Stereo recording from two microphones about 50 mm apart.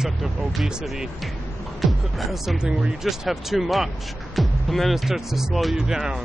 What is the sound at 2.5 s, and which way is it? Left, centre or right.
Speech, centre.